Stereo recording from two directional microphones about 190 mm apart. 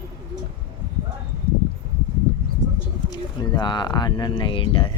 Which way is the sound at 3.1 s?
25° left (ahead or behind).